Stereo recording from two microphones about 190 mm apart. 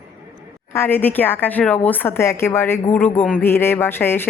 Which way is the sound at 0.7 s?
10° left (ahead or behind).